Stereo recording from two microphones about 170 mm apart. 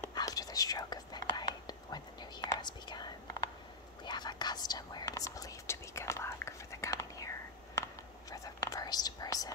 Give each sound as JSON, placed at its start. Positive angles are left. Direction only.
{"t": 0.0, "sound": "whispering", "side_deg": 20}